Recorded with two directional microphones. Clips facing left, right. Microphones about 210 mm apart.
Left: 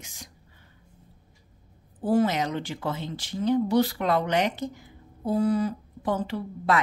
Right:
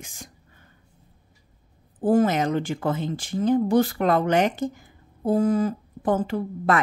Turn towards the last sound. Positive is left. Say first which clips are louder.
# right 3 dB
turn(degrees=-50)  # may be behind; listen again after turning